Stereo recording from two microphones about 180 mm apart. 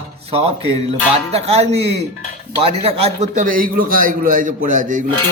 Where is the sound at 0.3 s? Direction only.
35° right (ahead or behind).